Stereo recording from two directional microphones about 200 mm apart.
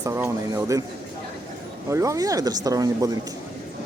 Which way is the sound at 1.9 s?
15° right (ahead or behind).